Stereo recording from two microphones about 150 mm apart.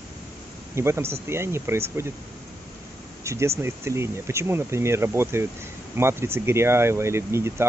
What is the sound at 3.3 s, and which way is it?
Speech, 15° right (ahead or behind).